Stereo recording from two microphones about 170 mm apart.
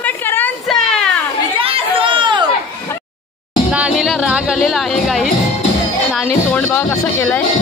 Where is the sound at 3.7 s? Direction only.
5° right (ahead or behind).